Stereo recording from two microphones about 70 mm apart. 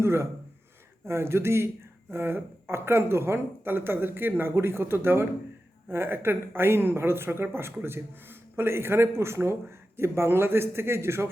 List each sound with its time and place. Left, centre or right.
0.0 s speech: right